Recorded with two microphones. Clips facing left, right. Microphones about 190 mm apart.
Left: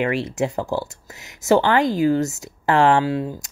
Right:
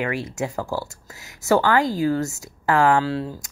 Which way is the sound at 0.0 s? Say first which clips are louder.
Left 4 dB; 25° left (ahead or behind).